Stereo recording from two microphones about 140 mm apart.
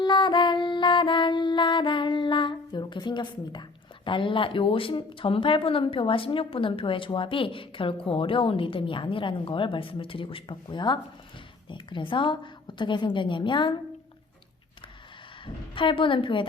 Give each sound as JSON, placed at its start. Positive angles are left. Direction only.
{"t": 0.0, "sound": "music", "side_deg": 35}
{"t": 11.7, "sound": "a woman's voice", "side_deg": 35}
{"t": 15.7, "sound": "a woman's voice", "side_deg": 35}